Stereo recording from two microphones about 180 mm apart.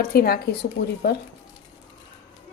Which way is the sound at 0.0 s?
60° left (ahead or behind).